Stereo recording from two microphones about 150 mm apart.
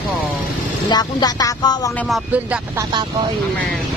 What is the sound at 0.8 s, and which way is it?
Speech, 25° left (ahead or behind).